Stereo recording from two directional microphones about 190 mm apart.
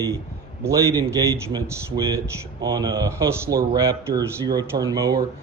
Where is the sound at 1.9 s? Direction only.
15° right (ahead or behind).